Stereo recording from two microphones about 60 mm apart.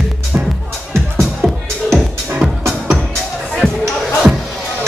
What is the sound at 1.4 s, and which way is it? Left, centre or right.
Music, centre.